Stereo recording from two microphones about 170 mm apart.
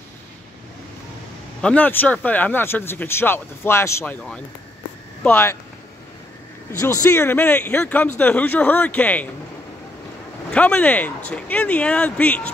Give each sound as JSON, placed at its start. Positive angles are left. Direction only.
{"t": 1.6, "sound": "speech", "side_deg": 5}
{"t": 6.8, "sound": "speech", "side_deg": 20}
{"t": 10.5, "sound": "speech", "side_deg": 5}